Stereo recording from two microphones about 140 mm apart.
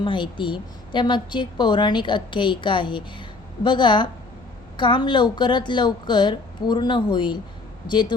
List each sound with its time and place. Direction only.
0.0 s a woman's voice: 35° left (ahead or behind)